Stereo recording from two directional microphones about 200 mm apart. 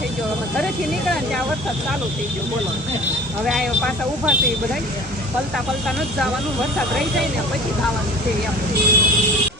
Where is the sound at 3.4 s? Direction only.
Centre (ahead or behind).